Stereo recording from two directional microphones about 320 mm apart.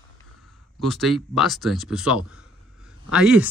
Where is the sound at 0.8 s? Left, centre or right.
Centre.